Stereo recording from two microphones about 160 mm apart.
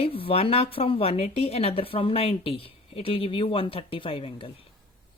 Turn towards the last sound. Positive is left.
turn(degrees=35)  # may be behind; listen again after turning